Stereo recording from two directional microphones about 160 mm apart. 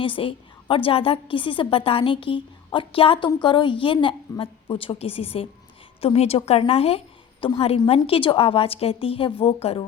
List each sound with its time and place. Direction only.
0.0 s a woman's voice: 35° left (ahead or behind)